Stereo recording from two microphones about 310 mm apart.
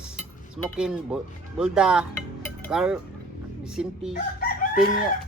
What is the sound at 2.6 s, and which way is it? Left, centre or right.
Cutlery, centre.